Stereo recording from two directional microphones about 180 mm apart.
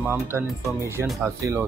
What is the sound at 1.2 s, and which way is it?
Speech, 15° right (ahead or behind).